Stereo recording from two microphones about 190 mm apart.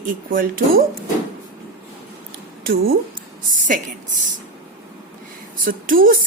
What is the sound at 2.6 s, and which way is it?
Speech, 50° right (ahead or behind).